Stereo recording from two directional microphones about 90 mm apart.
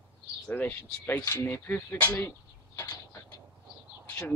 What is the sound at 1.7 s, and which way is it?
Speech, 20° left (ahead or behind).